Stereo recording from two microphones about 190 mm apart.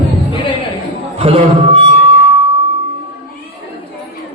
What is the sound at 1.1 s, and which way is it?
Music, 30° right (ahead or behind).